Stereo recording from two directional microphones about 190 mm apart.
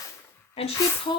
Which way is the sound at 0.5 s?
30° left (ahead or behind).